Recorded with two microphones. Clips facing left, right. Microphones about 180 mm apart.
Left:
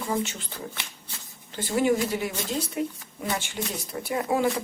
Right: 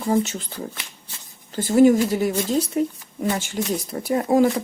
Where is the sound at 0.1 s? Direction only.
40° right (ahead or behind).